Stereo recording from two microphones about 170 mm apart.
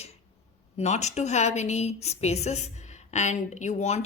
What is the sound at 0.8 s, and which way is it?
A woman's voice, 40° left (ahead or behind).